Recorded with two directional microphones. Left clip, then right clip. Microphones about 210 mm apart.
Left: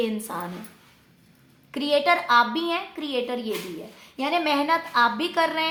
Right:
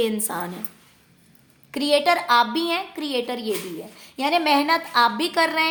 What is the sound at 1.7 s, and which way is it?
A woman's voice, 50° right (ahead or behind).